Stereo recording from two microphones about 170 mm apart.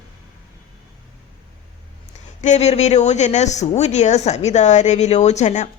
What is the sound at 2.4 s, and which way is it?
A woman's voice, 40° left (ahead or behind).